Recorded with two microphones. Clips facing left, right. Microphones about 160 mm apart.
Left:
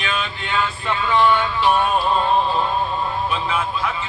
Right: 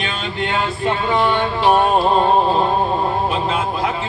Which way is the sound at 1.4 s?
45° right (ahead or behind).